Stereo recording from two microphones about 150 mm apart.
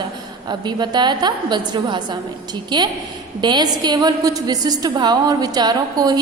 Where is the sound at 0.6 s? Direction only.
30° right (ahead or behind).